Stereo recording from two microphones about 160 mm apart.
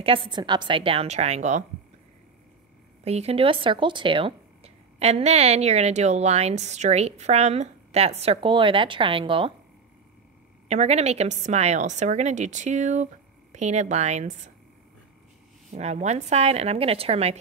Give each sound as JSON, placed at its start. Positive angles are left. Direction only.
{"t": 0.0, "sound": "speech", "side_deg": -35}
{"t": 3.0, "sound": "speech", "side_deg": -40}
{"t": 10.7, "sound": "a woman's voice", "side_deg": -45}
{"t": 15.7, "sound": "speech", "side_deg": -45}